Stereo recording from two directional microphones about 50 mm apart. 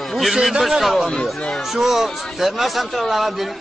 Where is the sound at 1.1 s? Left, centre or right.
Centre.